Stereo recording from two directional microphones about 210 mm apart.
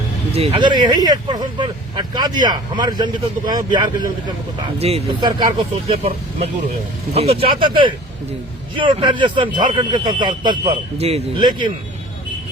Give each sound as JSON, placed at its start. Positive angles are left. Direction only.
{"t": 0.3, "sound": "speech", "side_deg": -25}